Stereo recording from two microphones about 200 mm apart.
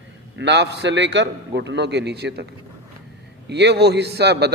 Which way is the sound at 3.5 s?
55° right (ahead or behind).